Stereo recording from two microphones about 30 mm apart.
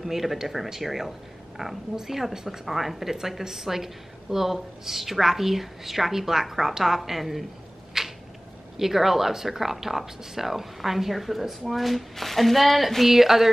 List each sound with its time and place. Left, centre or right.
0.0 s a woman's voice: centre
2.6 s a woman's voice: centre
8.0 s a sound: centre
8.7 s a woman's voice: centre